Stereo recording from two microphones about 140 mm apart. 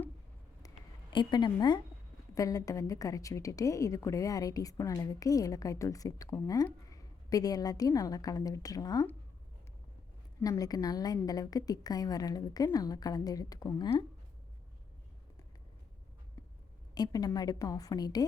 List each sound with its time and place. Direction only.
1.1 s a woman's voice: 35° left (ahead or behind)
10.4 s a woman's voice: 25° left (ahead or behind)
16.9 s a woman's voice: 30° left (ahead or behind)